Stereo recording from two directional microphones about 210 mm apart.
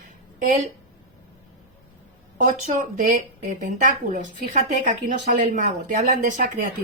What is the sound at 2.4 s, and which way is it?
Speech, 40° right (ahead or behind).